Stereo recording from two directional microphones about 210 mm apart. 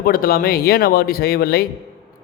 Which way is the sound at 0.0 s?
45° left (ahead or behind).